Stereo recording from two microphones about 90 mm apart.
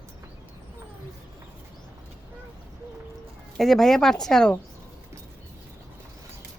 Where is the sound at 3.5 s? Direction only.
5° left (ahead or behind).